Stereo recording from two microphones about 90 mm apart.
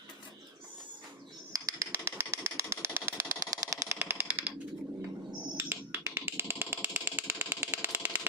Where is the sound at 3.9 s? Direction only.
20° right (ahead or behind).